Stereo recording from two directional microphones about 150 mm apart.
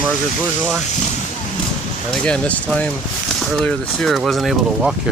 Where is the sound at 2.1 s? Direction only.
5° left (ahead or behind).